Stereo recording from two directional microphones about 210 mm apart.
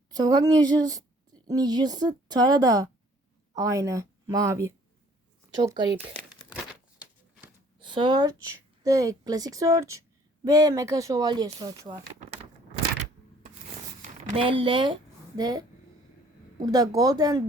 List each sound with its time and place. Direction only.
0.1 s a woman's voice: 20° right (ahead or behind)
7.8 s a woman's voice: 20° right (ahead or behind)
14.3 s speech: 25° right (ahead or behind)
16.7 s a woman's voice: 15° right (ahead or behind)